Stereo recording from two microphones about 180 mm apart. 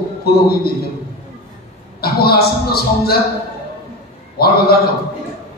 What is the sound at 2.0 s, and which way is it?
A man's voice, 60° left (ahead or behind).